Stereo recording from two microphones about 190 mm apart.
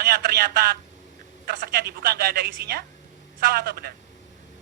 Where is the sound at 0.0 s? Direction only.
60° right (ahead or behind).